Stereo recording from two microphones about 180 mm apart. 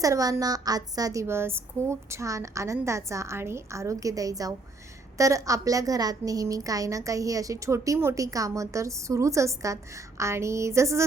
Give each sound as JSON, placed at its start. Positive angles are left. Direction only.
{"t": 0.0, "sound": "a woman's voice", "side_deg": -20}